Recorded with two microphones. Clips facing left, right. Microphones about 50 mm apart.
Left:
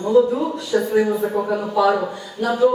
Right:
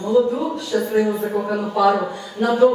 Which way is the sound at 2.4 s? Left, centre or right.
Right.